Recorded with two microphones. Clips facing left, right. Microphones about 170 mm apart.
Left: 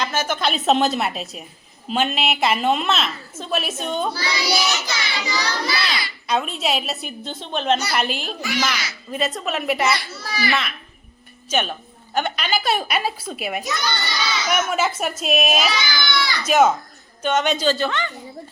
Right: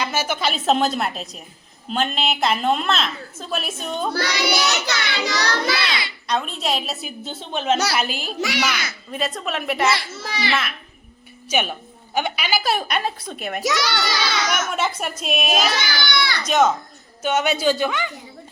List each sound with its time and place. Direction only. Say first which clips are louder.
0.0 s a woman's voice: even; 10° right (ahead or behind)
4.1 s child singing: right 2 dB; 65° right (ahead or behind)
6.2 s a woman's voice: left 2 dB; 5° left (ahead or behind)
8.4 s a child's voice: right 4 dB; 80° right
8.7 s a child's voice: right 1 dB; 55° right (ahead or behind)
9.1 s a woman's voice: left 2 dB; centre (ahead or behind)
9.9 s a child's voice: even; 25° right (ahead or behind)
10.5 s a woman's voice: even; centre (ahead or behind)
13.6 s a child's voice: right 3 dB; 90° right
14.5 s a woman's voice: left 2 dB; 5° left (ahead or behind)
17.2 s a man's voice: even; 10° right (ahead or behind)